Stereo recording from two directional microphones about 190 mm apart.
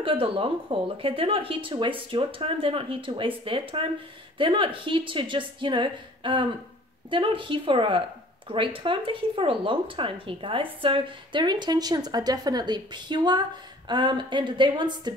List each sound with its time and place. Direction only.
0.0 s speech: 30° right (ahead or behind)